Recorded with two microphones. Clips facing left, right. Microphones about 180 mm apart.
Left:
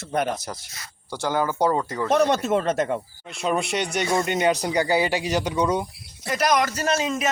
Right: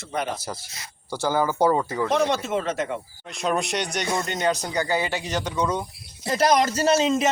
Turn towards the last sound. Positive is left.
turn(degrees=-25)  # may be behind; listen again after turning